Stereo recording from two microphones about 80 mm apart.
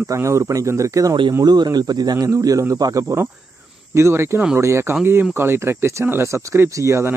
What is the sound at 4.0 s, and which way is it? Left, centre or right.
Speech, right.